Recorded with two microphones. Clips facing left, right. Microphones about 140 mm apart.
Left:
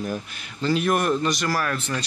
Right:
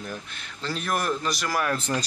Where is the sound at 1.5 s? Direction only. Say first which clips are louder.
Left 1 dB; 20° right (ahead or behind).